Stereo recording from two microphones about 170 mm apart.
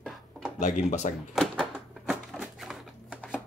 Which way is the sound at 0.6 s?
45° left (ahead or behind).